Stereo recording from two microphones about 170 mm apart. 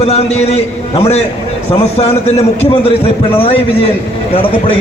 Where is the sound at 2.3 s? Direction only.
40° left (ahead or behind).